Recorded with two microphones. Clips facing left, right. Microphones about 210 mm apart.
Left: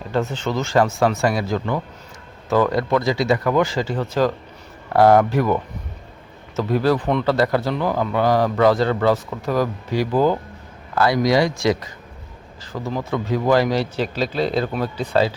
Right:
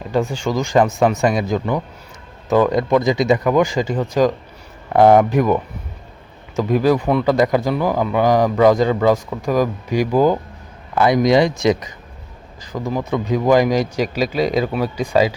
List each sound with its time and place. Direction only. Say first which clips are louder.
0.1 s a man's voice: right 3 dB; 15° right (ahead or behind)
6.6 s a man's voice: right 3 dB; 15° right (ahead or behind)